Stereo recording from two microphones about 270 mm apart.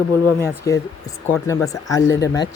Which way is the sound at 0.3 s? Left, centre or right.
Centre.